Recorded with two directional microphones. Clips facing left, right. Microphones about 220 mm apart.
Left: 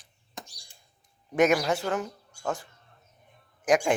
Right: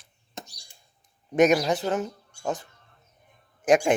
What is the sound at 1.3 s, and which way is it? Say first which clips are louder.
Speech: right 3 dB; 20° right (ahead or behind).